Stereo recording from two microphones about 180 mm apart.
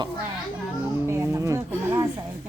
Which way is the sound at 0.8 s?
15° right (ahead or behind).